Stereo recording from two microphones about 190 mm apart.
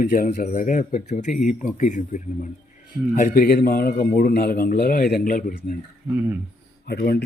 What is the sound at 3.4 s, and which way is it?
A man's voice, 50° left (ahead or behind).